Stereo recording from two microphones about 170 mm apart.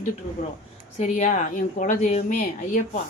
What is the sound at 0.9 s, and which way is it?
Speech, 40° left (ahead or behind).